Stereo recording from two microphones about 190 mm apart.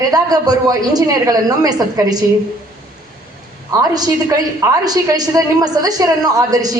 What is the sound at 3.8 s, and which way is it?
A woman's voice, 20° right (ahead or behind).